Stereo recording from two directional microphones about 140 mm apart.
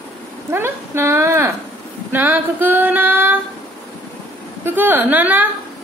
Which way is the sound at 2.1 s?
15° right (ahead or behind).